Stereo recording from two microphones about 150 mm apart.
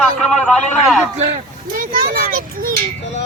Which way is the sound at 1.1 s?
50° right (ahead or behind).